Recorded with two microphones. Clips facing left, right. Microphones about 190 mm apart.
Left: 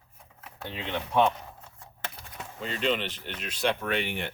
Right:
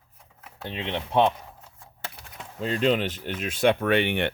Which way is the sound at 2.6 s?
45° right (ahead or behind).